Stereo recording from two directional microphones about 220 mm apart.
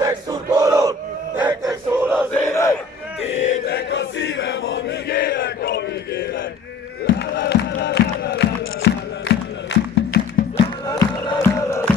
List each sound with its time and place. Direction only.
0.0 s battle cry: 15° right (ahead or behind)
2.3 s battle cry: 10° left (ahead or behind)
3.6 s chant: 50° left (ahead or behind)
7.1 s music: 50° left (ahead or behind)
10.9 s music: 15° left (ahead or behind)